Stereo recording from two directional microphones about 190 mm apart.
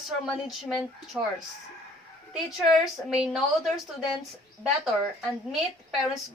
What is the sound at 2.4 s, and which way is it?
Speech, centre (ahead or behind).